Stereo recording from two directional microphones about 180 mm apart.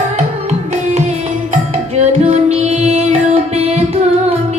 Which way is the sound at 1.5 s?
40° right (ahead or behind).